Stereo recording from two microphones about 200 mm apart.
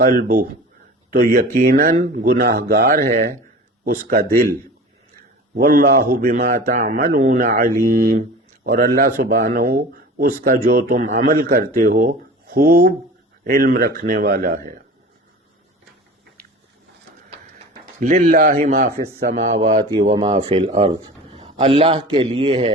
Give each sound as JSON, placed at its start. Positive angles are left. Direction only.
{"t": 0.0, "sound": "a man's voice", "side_deg": -45}
{"t": 5.5, "sound": "a man's voice", "side_deg": -45}
{"t": 18.0, "sound": "a man's voice", "side_deg": -40}